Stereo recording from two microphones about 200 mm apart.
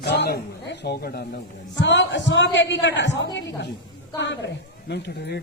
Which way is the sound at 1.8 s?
65° left (ahead or behind).